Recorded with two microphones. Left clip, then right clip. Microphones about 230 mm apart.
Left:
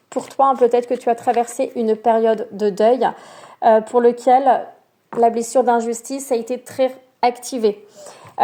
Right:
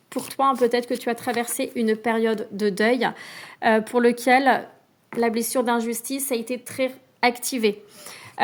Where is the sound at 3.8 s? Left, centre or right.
Right.